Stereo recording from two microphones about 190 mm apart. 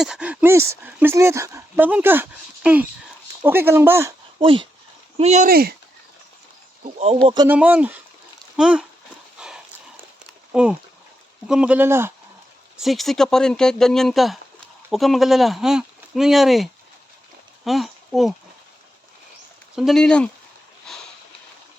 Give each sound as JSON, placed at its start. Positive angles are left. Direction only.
{"t": 0.0, "sound": "speech", "side_deg": -5}
{"t": 4.4, "sound": "speech", "side_deg": -25}
{"t": 5.5, "sound": "speech", "side_deg": -55}
{"t": 6.8, "sound": "speech", "side_deg": -35}
{"t": 7.4, "sound": "speech", "side_deg": -10}
{"t": 9.4, "sound": "dog", "side_deg": -5}
{"t": 10.5, "sound": "speech", "side_deg": -5}
{"t": 12.8, "sound": "speech", "side_deg": 0}
{"t": 17.7, "sound": "speech", "side_deg": 0}
{"t": 19.7, "sound": "speech", "side_deg": 0}
{"t": 20.9, "sound": "a sound", "side_deg": 0}